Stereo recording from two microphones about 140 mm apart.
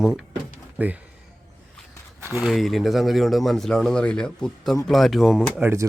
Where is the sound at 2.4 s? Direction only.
Centre (ahead or behind).